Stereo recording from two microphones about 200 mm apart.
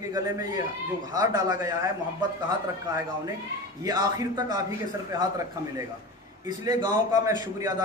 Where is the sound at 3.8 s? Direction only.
20° right (ahead or behind).